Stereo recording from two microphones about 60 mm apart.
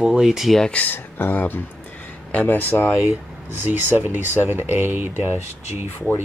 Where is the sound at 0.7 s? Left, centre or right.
Left.